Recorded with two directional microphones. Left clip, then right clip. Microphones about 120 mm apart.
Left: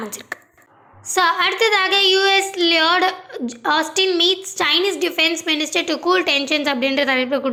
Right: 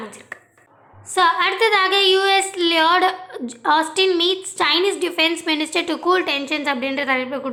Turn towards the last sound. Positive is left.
turn(degrees=25)  # may be behind; listen again after turning